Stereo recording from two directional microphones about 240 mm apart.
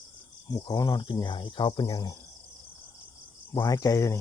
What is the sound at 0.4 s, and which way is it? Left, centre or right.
Speech, centre.